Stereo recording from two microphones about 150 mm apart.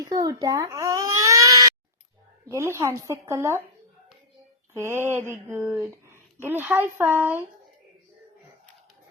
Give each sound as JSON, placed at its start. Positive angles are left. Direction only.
{"t": 0.0, "sound": "babbling", "side_deg": -25}
{"t": 2.5, "sound": "a woman's voice", "side_deg": -20}
{"t": 4.7, "sound": "a sound", "side_deg": -15}
{"t": 5.8, "sound": "speech", "side_deg": -15}